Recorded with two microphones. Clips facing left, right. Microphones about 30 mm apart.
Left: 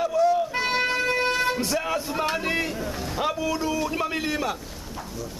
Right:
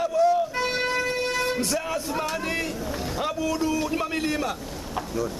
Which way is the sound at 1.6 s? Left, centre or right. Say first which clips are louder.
Left 1 dB; centre.